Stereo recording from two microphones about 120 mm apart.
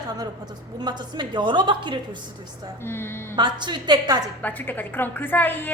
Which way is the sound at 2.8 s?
20° left (ahead or behind).